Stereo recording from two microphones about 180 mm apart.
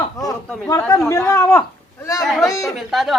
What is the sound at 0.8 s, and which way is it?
Speech, 15° left (ahead or behind).